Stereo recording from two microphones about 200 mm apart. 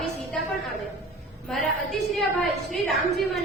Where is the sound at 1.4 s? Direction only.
Centre (ahead or behind).